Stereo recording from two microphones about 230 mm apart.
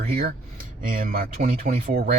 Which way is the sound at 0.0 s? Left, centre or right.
Right.